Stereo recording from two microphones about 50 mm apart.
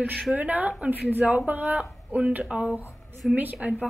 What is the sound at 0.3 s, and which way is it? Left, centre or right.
A woman's voice, right.